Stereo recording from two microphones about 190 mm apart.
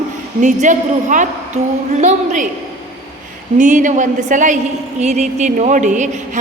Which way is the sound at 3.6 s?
40° right (ahead or behind).